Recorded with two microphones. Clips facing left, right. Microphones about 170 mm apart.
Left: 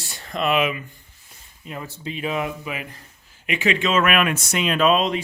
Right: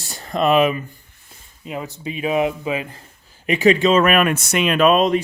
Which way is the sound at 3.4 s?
40° right (ahead or behind).